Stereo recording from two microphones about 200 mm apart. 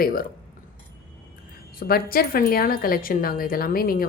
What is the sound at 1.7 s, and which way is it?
Speech, 50° left (ahead or behind).